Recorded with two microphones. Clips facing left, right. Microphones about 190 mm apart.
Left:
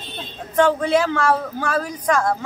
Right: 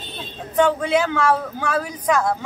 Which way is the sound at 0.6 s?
5° right (ahead or behind).